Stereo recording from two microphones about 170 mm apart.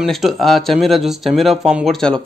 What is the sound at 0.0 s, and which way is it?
Speech, centre (ahead or behind).